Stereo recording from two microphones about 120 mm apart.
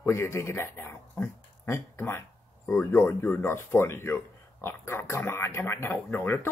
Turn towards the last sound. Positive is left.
turn(degrees=20)  # may be behind; listen again after turning